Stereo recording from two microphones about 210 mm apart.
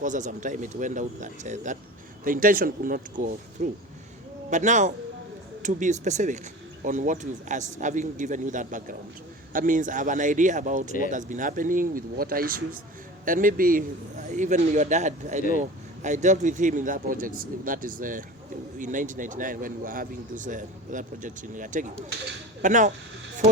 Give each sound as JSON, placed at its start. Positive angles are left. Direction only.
{"t": 0.0, "sound": "a man's voice", "side_deg": -35}